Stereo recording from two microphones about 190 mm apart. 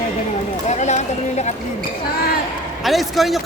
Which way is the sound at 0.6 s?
40° left (ahead or behind).